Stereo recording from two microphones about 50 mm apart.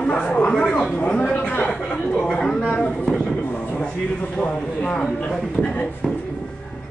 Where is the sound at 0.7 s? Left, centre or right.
Centre.